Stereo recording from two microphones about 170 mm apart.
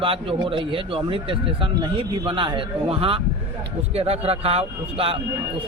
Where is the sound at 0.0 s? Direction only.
30° right (ahead or behind).